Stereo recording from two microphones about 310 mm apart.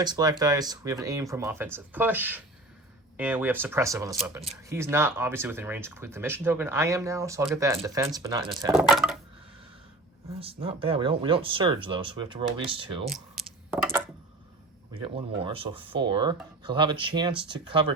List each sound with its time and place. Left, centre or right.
0.0 s speech: centre
8.7 s a sound: centre
10.4 s speech: centre
13.1 s speech: centre
13.4 s a sound: centre
15.4 s speech: centre